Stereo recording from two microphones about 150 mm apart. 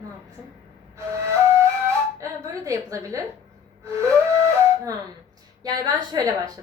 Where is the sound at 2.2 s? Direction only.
20° right (ahead or behind).